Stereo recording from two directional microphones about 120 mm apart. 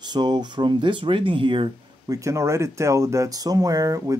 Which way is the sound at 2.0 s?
25° right (ahead or behind).